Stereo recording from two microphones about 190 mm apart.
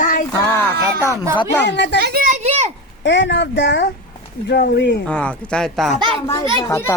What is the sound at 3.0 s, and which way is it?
Speech, 70° left (ahead or behind).